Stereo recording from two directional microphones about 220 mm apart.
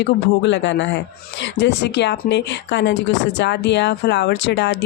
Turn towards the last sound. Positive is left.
turn(degrees=50)  # may be behind; listen again after turning